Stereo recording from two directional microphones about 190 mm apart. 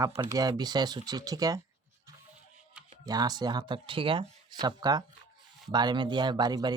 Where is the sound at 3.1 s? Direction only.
20° right (ahead or behind).